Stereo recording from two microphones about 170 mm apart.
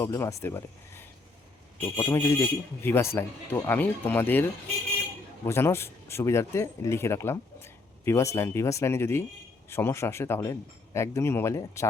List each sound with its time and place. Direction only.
0.0 s speech: 15° left (ahead or behind)
5.5 s speech: 15° left (ahead or behind)